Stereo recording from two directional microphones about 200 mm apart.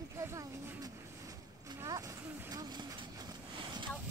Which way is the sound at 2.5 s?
20° right (ahead or behind).